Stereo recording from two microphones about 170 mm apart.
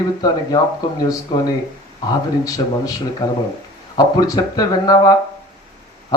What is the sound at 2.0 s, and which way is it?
Speech, 20° left (ahead or behind).